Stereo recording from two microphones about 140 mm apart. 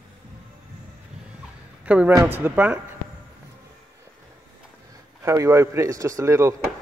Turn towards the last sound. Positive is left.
turn(degrees=-20)  # may be behind; listen again after turning